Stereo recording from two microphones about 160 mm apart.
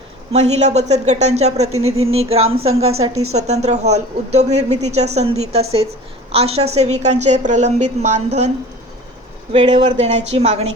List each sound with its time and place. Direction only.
0.3 s speech: 45° right (ahead or behind)
9.5 s speech: 40° right (ahead or behind)